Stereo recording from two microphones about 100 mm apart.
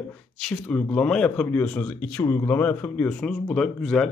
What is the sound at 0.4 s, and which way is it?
Speech, 10° left (ahead or behind).